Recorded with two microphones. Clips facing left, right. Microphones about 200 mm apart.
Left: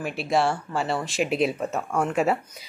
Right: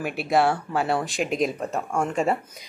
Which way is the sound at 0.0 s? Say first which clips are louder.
Right 2 dB; centre (ahead or behind).